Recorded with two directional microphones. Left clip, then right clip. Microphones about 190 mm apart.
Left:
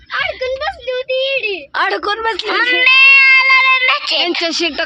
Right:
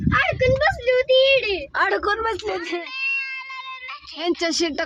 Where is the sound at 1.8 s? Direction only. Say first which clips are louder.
Left 5 dB; 25° left (ahead or behind).